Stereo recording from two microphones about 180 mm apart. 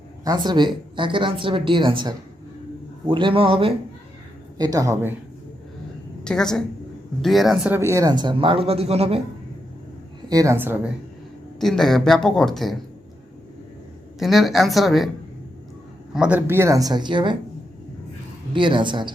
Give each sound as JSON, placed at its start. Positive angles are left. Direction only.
{"t": 0.3, "sound": "a man's voice", "side_deg": -25}
{"t": 4.5, "sound": "speech", "side_deg": -20}
{"t": 6.2, "sound": "speech", "side_deg": 5}
{"t": 10.2, "sound": "a woman's voice", "side_deg": -20}
{"t": 11.6, "sound": "speech", "side_deg": 0}
{"t": 14.2, "sound": "speech", "side_deg": 0}
{"t": 16.1, "sound": "speech", "side_deg": -5}
{"t": 18.5, "sound": "speech", "side_deg": -25}